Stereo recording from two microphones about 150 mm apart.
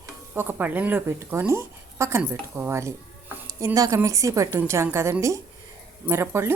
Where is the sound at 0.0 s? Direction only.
15° right (ahead or behind).